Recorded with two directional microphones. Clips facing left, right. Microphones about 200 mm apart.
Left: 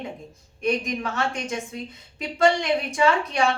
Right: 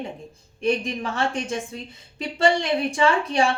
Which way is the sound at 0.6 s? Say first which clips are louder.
Right 1 dB; 30° right (ahead or behind).